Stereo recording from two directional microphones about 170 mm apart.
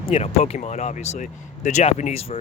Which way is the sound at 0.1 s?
40° left (ahead or behind).